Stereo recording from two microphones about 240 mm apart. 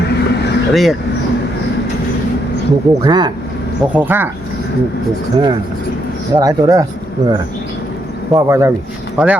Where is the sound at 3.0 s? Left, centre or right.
Centre.